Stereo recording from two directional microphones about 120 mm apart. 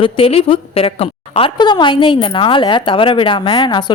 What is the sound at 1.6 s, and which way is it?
A woman's voice, 40° left (ahead or behind).